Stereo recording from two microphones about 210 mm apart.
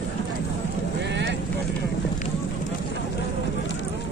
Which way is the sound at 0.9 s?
55° right (ahead or behind).